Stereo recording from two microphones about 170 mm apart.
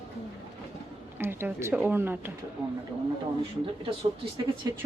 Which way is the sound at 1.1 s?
15° right (ahead or behind).